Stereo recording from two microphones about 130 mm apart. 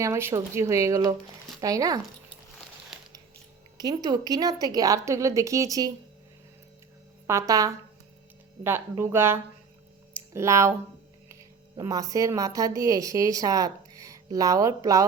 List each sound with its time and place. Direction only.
0.0 s a woman's voice: 20° right (ahead or behind)
3.8 s a woman's voice: 30° right (ahead or behind)
7.3 s a woman's voice: 25° right (ahead or behind)
11.8 s a woman's voice: 25° right (ahead or behind)